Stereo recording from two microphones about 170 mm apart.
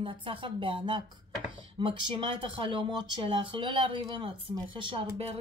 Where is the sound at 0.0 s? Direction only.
30° right (ahead or behind).